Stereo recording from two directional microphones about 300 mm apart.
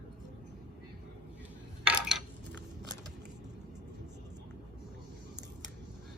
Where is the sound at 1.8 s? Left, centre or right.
Centre.